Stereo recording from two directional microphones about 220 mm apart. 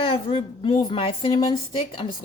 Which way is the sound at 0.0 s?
25° left (ahead or behind).